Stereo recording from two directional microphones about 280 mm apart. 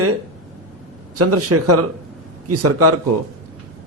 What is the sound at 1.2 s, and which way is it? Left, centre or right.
A man's voice, right.